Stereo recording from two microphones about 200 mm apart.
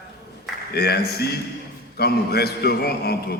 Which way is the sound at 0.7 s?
55° left (ahead or behind).